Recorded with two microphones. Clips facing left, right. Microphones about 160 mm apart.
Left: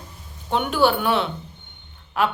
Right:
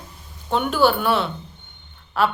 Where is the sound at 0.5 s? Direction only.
15° left (ahead or behind).